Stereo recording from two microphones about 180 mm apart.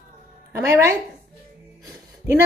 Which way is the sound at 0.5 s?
15° right (ahead or behind).